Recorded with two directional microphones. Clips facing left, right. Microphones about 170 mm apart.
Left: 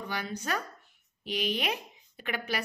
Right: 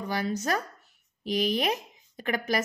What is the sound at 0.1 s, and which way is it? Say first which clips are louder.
Speech: right 6 dB; 40° right (ahead or behind).